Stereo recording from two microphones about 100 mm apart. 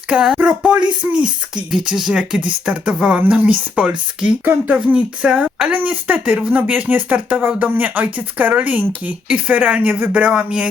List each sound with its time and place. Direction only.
0.1 s speech: 10° right (ahead or behind)